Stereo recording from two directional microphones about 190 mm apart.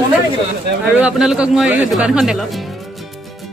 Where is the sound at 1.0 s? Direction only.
5° right (ahead or behind).